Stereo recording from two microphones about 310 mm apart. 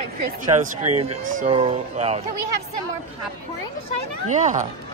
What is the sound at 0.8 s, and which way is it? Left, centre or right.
Speech, right.